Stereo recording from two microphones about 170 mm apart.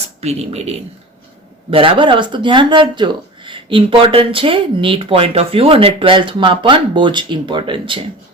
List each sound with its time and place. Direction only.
0.2 s speech: 40° right (ahead or behind)